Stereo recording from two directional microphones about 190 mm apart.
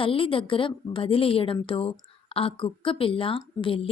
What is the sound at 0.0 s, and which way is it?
A woman's voice, 30° left (ahead or behind).